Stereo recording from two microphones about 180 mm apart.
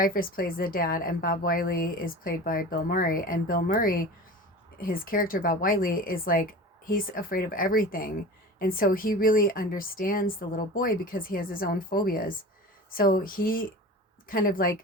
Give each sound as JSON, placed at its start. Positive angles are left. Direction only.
{"t": 0.0, "sound": "a woman's voice", "side_deg": 50}